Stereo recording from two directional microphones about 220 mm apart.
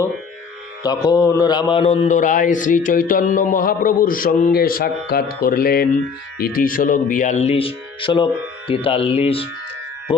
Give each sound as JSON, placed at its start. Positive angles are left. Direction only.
{"t": 0.8, "sound": "a man's voice", "side_deg": 15}